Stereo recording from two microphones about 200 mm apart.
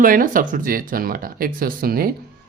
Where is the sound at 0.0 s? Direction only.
45° right (ahead or behind).